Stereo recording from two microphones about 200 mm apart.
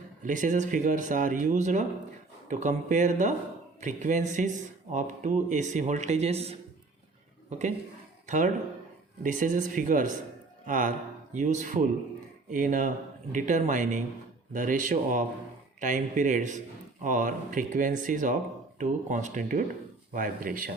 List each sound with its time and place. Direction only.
0.2 s speech: 40° right (ahead or behind)
9.2 s speech: 40° right (ahead or behind)